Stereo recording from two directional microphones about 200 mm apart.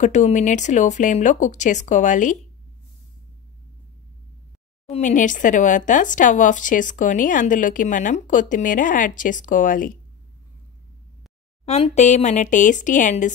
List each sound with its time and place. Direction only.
0.0 s speech: 35° left (ahead or behind)
4.9 s speech: 40° left (ahead or behind)
11.6 s speech: 30° left (ahead or behind)